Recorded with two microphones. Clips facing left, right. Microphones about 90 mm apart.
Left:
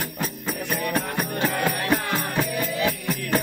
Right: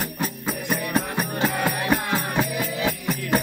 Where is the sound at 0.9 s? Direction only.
10° right (ahead or behind).